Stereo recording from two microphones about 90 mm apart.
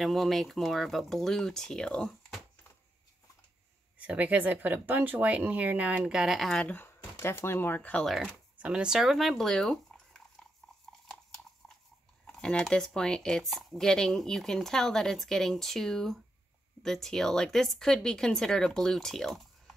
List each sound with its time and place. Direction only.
0.0 s speech: centre (ahead or behind)
4.0 s speech: 15° right (ahead or behind); by 6.6 s centre (ahead or behind)
6.6 s speech: 15° left (ahead or behind)
7.2 s speech: 25° left (ahead or behind)
7.9 s speech: 5° left (ahead or behind)
8.5 s speech: 15° right (ahead or behind); by 10.2 s 5° left (ahead or behind)
10.9 s a sound: 5° left (ahead or behind)
12.3 s speech: 10° left (ahead or behind)